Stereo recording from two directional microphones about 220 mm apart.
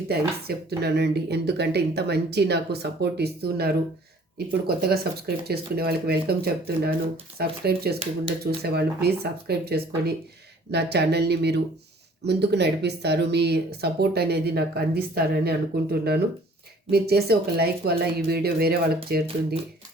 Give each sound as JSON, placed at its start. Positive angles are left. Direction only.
{"t": 0.8, "sound": "speech", "side_deg": -50}